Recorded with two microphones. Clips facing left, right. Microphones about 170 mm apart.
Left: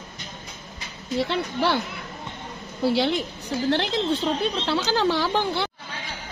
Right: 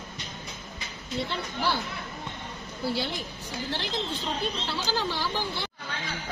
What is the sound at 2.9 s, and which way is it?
A woman's voice, 65° left (ahead or behind).